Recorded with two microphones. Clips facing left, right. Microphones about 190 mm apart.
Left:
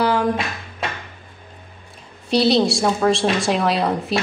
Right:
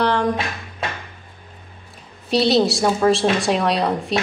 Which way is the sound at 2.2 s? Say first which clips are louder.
Even; centre (ahead or behind).